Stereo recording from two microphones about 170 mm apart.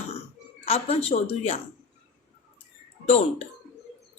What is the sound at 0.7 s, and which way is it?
Speech, 35° left (ahead or behind).